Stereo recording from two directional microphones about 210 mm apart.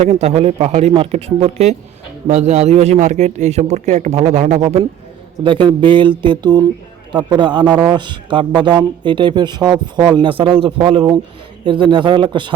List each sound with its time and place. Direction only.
0.0 s a man's voice: 30° right (ahead or behind)